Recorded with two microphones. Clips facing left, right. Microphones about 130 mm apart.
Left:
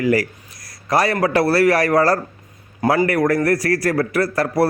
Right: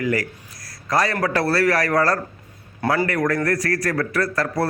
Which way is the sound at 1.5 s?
25° left (ahead or behind).